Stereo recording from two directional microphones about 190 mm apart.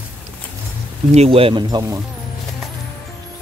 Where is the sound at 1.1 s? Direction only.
30° right (ahead or behind).